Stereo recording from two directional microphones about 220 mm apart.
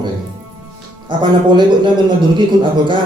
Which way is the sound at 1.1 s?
20° right (ahead or behind).